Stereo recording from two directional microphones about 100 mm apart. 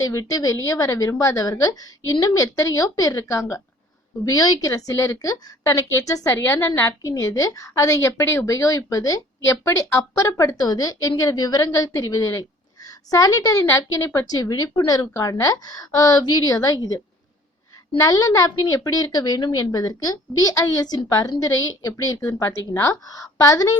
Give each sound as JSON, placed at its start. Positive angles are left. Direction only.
{"t": 0.0, "sound": "a woman's voice", "side_deg": 35}